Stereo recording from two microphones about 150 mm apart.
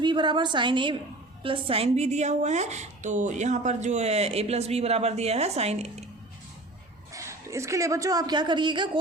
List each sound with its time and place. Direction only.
0.0 s a woman's voice: 30° right (ahead or behind)
7.1 s a woman's voice: 20° right (ahead or behind)